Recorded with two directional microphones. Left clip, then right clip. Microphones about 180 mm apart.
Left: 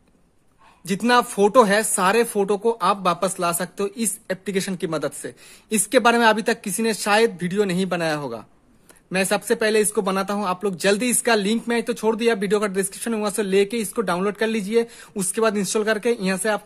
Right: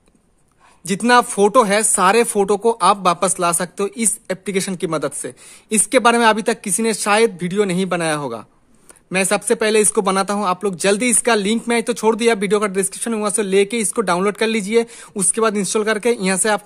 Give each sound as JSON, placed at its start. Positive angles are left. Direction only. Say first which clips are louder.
{"t": 0.8, "sound": "speech", "louder": "right 5 dB", "side_deg": -25}